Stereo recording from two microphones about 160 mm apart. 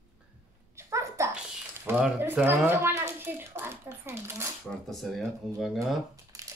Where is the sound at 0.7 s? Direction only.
15° right (ahead or behind).